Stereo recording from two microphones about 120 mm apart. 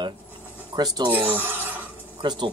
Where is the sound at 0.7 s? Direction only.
35° right (ahead or behind).